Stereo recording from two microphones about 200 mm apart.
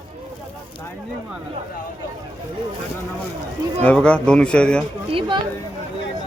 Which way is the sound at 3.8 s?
5° left (ahead or behind).